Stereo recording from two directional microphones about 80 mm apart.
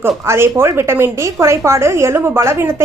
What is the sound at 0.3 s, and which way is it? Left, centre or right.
A woman's voice, right.